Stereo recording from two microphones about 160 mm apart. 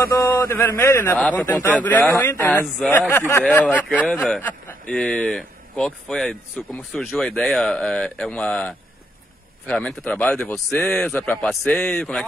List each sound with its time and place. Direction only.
0.2 s a man's voice: 20° left (ahead or behind)